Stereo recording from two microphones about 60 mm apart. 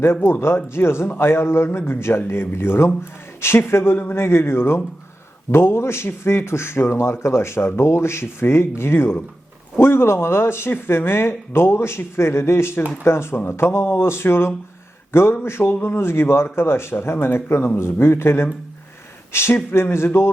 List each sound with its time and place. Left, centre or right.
0.0 s speech: left